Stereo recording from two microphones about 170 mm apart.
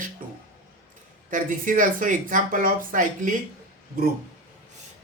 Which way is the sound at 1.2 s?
50° right (ahead or behind).